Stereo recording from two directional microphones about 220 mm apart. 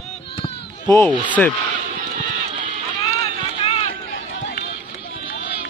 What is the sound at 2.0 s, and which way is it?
Run, 40° right (ahead or behind).